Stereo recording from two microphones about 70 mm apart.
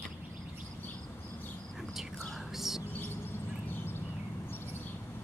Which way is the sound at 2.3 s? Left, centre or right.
Centre.